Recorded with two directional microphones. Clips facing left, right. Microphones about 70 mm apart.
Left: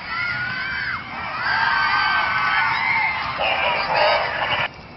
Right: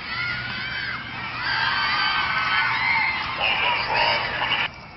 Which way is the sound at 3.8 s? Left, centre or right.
Left.